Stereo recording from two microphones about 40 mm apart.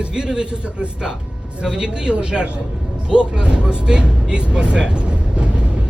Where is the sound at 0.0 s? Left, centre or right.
Centre.